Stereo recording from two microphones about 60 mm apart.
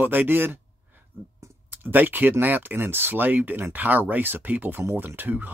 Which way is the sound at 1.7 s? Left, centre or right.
Right.